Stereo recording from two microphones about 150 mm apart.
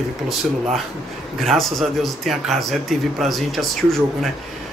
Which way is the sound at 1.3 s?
Centre (ahead or behind).